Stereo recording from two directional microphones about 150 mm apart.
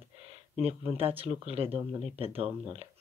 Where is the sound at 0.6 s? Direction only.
40° right (ahead or behind).